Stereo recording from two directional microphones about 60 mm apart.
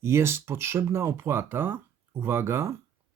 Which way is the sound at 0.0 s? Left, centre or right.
Right.